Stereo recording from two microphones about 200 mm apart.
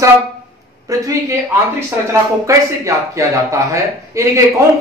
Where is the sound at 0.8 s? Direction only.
15° right (ahead or behind).